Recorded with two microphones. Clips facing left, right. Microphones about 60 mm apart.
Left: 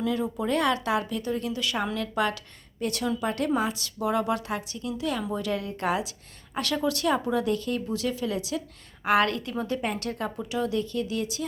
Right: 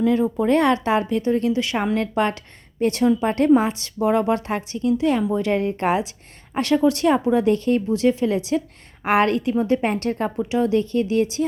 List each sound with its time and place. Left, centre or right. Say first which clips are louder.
0.0 s speech: right 8 dB; right
7.9 s speech: right 10 dB; right